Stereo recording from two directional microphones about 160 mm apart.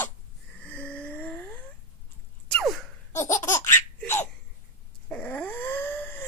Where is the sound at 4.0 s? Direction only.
15° left (ahead or behind).